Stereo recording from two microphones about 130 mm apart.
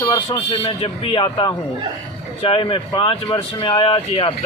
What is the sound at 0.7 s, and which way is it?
Speech, 45° left (ahead or behind).